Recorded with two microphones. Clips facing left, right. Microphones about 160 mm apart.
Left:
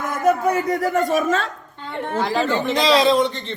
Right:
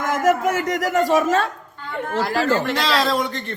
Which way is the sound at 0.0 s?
90° right.